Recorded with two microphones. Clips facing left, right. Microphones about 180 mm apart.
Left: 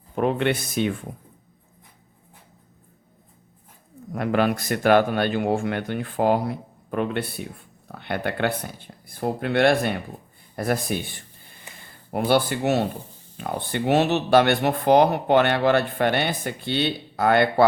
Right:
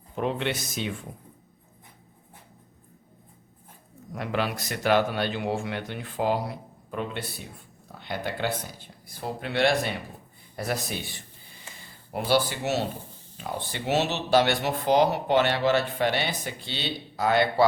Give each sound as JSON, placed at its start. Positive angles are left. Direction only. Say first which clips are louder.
{"t": 0.2, "sound": "speech", "louder": "left 6 dB", "side_deg": 55}
{"t": 4.1, "sound": "speech", "louder": "left 7 dB", "side_deg": 50}
{"t": 10.5, "sound": "a sound", "louder": "left 6 dB", "side_deg": 55}
{"t": 13.3, "sound": "speech", "louder": "left 6 dB", "side_deg": 55}